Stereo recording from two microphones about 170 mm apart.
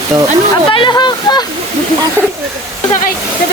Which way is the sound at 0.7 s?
25° left (ahead or behind).